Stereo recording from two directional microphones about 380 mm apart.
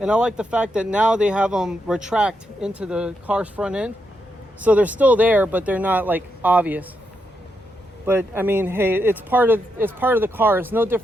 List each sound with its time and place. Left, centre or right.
0.0 s speech: centre
8.0 s speech: centre